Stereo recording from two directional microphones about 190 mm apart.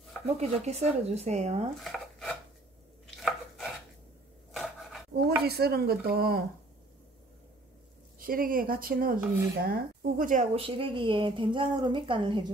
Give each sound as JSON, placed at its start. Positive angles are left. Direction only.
{"t": 0.4, "sound": "speech", "side_deg": -35}
{"t": 1.8, "sound": "a sound", "side_deg": 0}
{"t": 3.2, "sound": "chopping", "side_deg": 0}
{"t": 4.5, "sound": "a sound", "side_deg": 0}
{"t": 5.1, "sound": "speech", "side_deg": -55}
{"t": 8.2, "sound": "speech", "side_deg": -50}
{"t": 10.5, "sound": "speech", "side_deg": -30}